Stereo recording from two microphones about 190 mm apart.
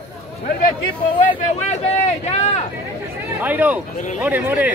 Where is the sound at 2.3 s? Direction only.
35° left (ahead or behind).